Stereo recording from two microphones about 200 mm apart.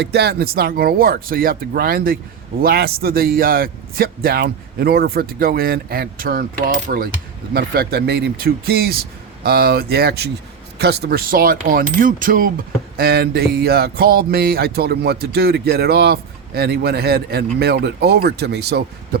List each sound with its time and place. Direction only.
0.0 s a man's voice: 55° right (ahead or behind)